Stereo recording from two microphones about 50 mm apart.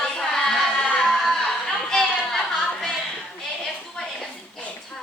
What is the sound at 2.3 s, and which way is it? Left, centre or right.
Music, centre.